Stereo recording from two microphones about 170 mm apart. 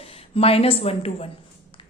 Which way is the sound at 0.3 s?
35° left (ahead or behind).